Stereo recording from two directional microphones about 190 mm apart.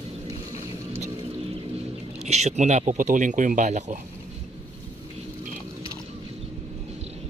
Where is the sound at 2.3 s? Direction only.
35° right (ahead or behind).